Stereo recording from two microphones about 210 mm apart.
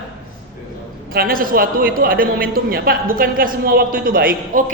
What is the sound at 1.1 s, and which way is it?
A woman's voice, 45° right (ahead or behind).